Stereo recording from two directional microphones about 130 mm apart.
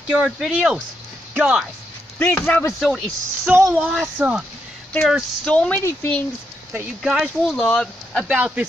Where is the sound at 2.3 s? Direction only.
20° left (ahead or behind).